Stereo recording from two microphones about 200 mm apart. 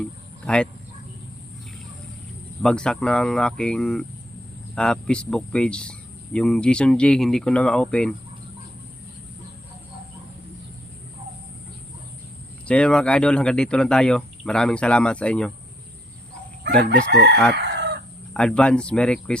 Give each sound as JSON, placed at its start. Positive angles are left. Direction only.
{"t": 0.0, "sound": "a sound", "side_deg": 5}
{"t": 2.6, "sound": "speech", "side_deg": 5}
{"t": 12.6, "sound": "speech", "side_deg": 5}
{"t": 16.7, "sound": "chicken", "side_deg": -60}
{"t": 17.1, "sound": "crowing", "side_deg": -55}
{"t": 17.5, "sound": "chicken", "side_deg": -55}
{"t": 18.3, "sound": "speech", "side_deg": 5}